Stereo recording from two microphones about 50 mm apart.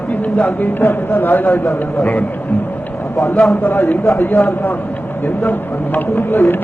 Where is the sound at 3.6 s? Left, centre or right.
Left.